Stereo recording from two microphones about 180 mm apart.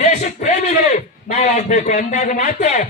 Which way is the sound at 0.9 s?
40° left (ahead or behind).